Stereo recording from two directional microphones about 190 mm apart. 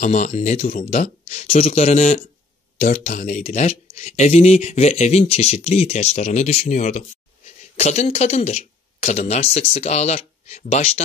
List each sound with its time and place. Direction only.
0.0 s speech: 40° left (ahead or behind)